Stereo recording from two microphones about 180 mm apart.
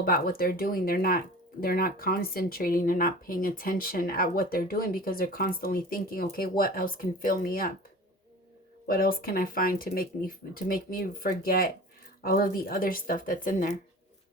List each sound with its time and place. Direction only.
0.0 s speech: 55° left (ahead or behind)
8.9 s speech: 55° left (ahead or behind)